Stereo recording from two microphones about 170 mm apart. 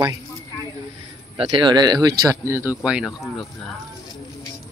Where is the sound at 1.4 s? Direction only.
30° right (ahead or behind); by 3.5 s centre (ahead or behind).